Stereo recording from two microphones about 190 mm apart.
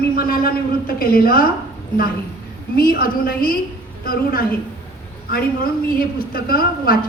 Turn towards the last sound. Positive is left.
turn(degrees=50)  # may be behind; listen again after turning